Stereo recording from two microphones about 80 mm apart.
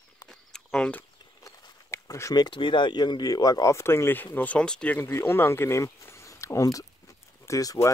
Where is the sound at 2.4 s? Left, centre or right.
Left; by 5.0 s centre.